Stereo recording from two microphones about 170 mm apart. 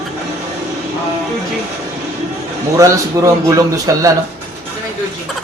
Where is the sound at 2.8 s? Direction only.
20° right (ahead or behind).